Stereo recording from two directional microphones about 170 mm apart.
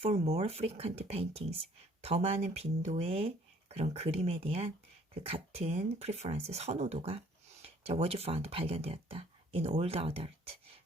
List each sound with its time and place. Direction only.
0.0 s speech: 35° right (ahead or behind)